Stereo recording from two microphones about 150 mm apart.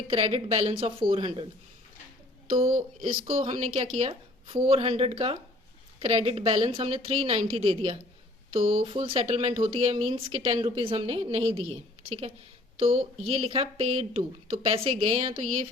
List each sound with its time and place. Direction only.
0.1 s speech: 40° right (ahead or behind)
3.2 s speech: 45° right (ahead or behind)